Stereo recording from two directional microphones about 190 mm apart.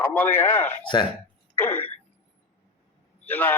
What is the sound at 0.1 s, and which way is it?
Speech, 10° left (ahead or behind).